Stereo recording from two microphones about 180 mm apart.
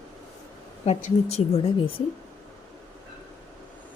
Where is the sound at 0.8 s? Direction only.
35° left (ahead or behind).